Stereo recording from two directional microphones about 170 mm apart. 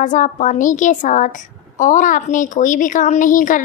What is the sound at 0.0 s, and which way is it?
A woman's voice, 50° left (ahead or behind).